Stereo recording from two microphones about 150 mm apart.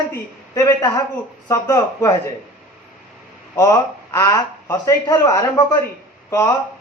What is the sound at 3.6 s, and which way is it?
Speech, 20° left (ahead or behind).